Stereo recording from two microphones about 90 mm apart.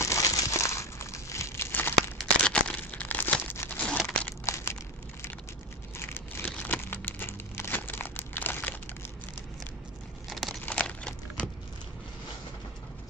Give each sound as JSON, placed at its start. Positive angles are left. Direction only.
{"t": 0.0, "sound": "crumpling", "side_deg": 35}
{"t": 2.1, "sound": "tearing", "side_deg": 10}
{"t": 4.5, "sound": "crushing", "side_deg": 30}
{"t": 5.9, "sound": "a sound", "side_deg": 25}
{"t": 6.6, "sound": "crumpling", "side_deg": 20}
{"t": 10.3, "sound": "crumpling", "side_deg": 0}
{"t": 10.7, "sound": "a sound", "side_deg": 10}